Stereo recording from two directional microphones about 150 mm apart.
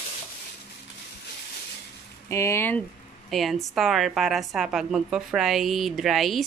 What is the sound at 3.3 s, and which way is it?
A woman's voice, centre (ahead or behind).